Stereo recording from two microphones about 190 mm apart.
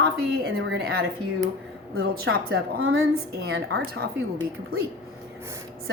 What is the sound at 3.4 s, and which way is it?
Speech, 55° right (ahead or behind).